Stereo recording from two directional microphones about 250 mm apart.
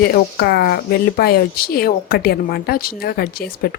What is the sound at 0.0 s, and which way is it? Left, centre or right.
Speech, left.